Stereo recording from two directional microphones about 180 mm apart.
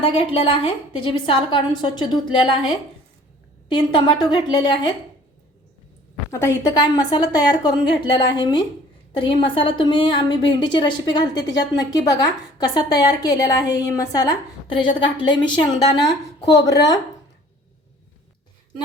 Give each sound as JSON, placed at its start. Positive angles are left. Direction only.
{"t": 0.0, "sound": "a woman's voice", "side_deg": 30}
{"t": 3.7, "sound": "a woman's voice", "side_deg": 25}
{"t": 6.3, "sound": "a woman's voice", "side_deg": 20}